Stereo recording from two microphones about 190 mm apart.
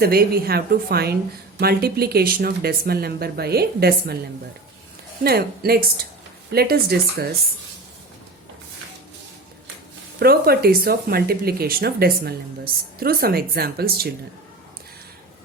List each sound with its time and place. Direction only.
0.0 s speech: 55° right (ahead or behind)
5.2 s speech: 55° right (ahead or behind)
10.2 s speech: 55° right (ahead or behind)